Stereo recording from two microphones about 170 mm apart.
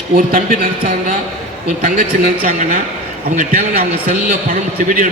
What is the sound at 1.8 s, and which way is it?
A man's voice, 55° right (ahead or behind).